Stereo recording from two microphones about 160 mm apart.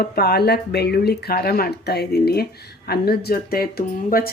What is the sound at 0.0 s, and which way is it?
Speech, 90° left.